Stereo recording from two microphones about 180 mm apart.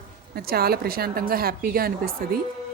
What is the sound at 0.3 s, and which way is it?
Speech, 60° right (ahead or behind).